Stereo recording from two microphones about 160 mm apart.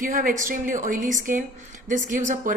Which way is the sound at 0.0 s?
60° right (ahead or behind).